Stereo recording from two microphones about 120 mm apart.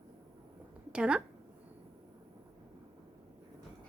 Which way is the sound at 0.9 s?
10° right (ahead or behind).